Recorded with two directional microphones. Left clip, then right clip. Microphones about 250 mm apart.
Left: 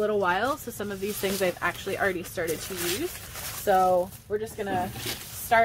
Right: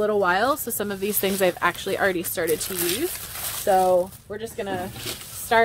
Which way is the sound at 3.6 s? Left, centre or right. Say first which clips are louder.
Right 3 dB; right.